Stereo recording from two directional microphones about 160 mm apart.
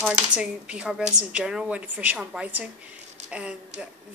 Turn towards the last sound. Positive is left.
turn(degrees=-5)  # may be behind; listen again after turning